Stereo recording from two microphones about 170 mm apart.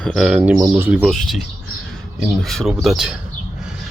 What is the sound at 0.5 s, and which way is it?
Speech, 15° right (ahead or behind).